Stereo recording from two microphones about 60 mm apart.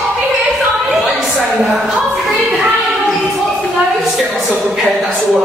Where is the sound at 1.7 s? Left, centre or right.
Centre.